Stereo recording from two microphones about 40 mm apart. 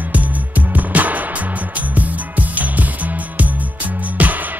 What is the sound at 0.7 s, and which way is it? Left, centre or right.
Music, right.